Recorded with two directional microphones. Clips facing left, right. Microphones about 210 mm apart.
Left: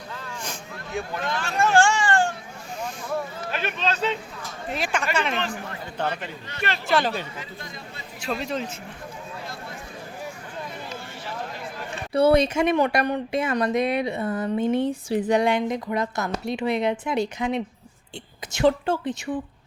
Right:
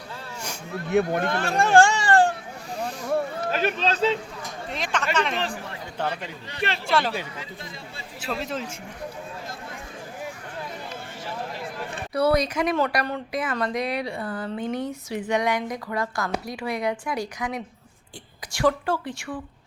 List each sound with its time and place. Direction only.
0.9 s speech: 60° right (ahead or behind)
1.5 s speech: 35° right (ahead or behind)
2.7 s a sound: 35° right (ahead or behind)
3.5 s speech: 40° right (ahead or behind)
4.7 s speech: 10° left (ahead or behind)
6.8 s speech: centre (ahead or behind)
12.1 s speech: 25° left (ahead or behind)